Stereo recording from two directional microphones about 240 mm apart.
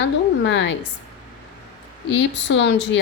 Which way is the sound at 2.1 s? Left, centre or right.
Left.